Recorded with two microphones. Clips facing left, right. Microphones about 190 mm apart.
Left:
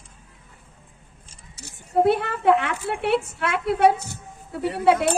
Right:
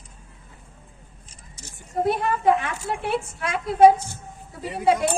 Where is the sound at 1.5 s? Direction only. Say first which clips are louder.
Left 6 dB; 65° left (ahead or behind).